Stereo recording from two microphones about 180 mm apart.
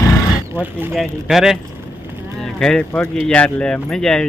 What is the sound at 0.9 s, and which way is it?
Speech, centre (ahead or behind).